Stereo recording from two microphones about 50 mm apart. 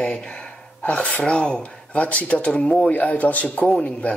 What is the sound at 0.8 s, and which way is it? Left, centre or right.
Speech, left.